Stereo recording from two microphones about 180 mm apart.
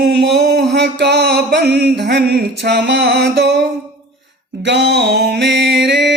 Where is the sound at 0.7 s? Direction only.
70° right (ahead or behind).